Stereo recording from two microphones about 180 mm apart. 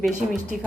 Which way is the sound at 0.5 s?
45° right (ahead or behind).